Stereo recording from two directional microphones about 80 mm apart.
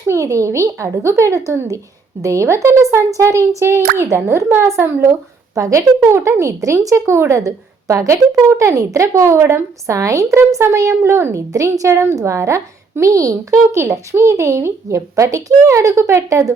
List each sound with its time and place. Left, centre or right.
0.1 s speech: right
5.5 s speech: right